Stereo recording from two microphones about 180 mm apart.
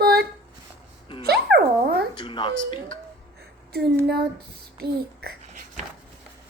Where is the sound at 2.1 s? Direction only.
25° left (ahead or behind).